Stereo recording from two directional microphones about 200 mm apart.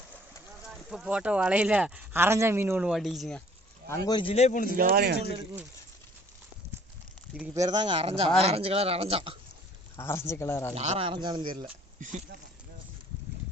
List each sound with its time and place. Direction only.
0.6 s speech: 5° right (ahead or behind)
3.8 s speech: 15° left (ahead or behind); by 4.7 s 35° left (ahead or behind)
4.8 s speech: 45° right (ahead or behind)
7.3 s speech: 5° right (ahead or behind)
7.6 s speech: 20° right (ahead or behind)
10.0 s speech: 15° left (ahead or behind)
10.8 s speech: 30° right (ahead or behind)
11.9 s speech: 40° right (ahead or behind)